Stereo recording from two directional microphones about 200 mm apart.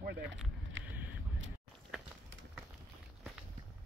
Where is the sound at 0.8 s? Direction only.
70° right (ahead or behind).